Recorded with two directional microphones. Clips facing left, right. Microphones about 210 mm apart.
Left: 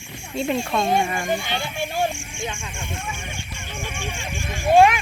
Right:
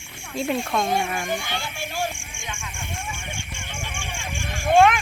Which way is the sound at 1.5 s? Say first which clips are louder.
Left 4 dB; 20° left (ahead or behind).